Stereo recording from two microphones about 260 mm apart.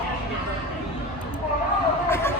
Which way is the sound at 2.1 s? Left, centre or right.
Centre.